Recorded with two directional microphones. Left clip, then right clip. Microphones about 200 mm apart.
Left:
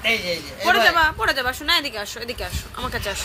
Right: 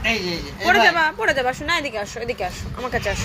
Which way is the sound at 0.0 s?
20° left (ahead or behind).